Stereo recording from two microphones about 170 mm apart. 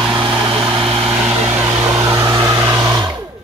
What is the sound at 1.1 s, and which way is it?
Vehicle, 15° right (ahead or behind).